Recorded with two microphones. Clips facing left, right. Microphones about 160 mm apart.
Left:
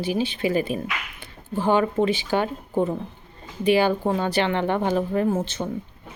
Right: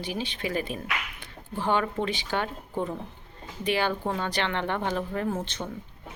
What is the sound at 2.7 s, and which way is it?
Speech, 25° left (ahead or behind).